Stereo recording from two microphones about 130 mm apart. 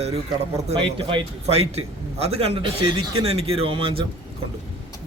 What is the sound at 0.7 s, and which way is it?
A man's voice, 45° right (ahead or behind).